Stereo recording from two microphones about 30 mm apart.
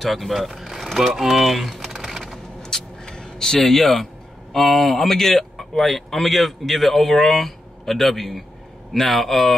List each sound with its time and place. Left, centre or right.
0.0 s speech: centre
0.9 s typing: centre
2.6 s vehicle: centre
3.7 s speech: centre